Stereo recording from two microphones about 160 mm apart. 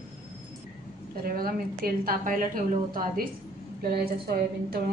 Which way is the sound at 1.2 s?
65° right (ahead or behind).